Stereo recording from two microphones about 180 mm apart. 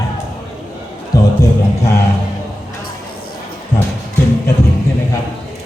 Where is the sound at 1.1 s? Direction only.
20° left (ahead or behind).